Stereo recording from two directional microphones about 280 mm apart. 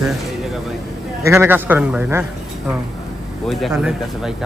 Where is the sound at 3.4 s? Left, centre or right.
Centre.